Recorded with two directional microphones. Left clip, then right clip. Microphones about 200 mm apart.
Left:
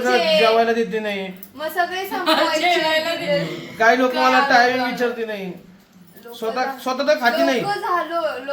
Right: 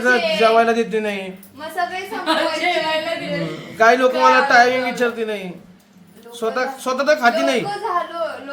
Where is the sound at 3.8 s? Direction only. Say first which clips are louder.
Right 2 dB; 10° right (ahead or behind).